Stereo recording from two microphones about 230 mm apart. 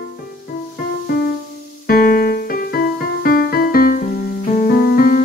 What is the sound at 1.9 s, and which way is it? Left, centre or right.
Music, left.